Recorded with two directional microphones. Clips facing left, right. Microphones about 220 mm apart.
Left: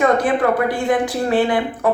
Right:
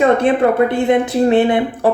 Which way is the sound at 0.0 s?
25° right (ahead or behind).